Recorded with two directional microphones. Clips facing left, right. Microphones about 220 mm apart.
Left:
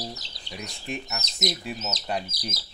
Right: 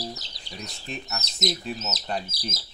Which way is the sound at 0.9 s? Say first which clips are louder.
Left 2 dB; 15° left (ahead or behind).